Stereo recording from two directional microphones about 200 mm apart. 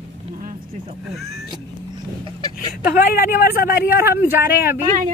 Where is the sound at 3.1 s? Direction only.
45° left (ahead or behind).